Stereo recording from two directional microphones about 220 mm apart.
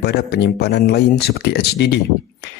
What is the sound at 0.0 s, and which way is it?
Speech, 50° left (ahead or behind).